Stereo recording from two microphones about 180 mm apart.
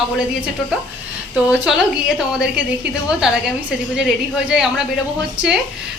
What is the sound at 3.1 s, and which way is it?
A woman's voice, 5° right (ahead or behind).